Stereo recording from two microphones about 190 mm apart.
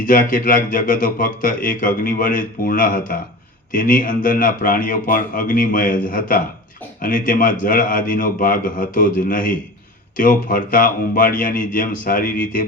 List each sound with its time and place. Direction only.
0.0 s speech: 45° left (ahead or behind)